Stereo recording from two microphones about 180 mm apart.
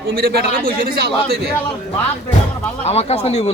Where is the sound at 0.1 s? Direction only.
60° right (ahead or behind).